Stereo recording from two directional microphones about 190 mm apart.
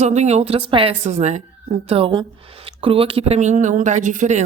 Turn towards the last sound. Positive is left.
turn(degrees=-40)  # may be behind; listen again after turning